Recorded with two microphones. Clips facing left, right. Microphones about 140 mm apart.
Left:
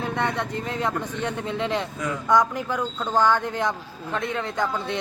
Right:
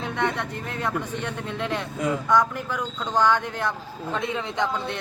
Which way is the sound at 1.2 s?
10° left (ahead or behind).